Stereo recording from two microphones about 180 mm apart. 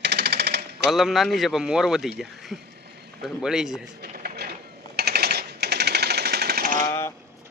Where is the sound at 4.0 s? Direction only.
60° right (ahead or behind).